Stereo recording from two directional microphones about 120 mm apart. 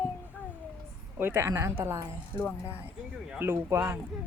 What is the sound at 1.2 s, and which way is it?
Speech, 20° right (ahead or behind).